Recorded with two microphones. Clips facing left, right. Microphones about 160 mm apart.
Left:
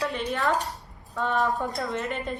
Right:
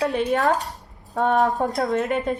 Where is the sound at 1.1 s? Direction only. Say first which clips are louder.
Right 6 dB; 45° right (ahead or behind).